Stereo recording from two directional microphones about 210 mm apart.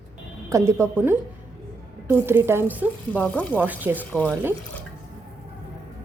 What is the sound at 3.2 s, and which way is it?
Speech, 5° left (ahead or behind).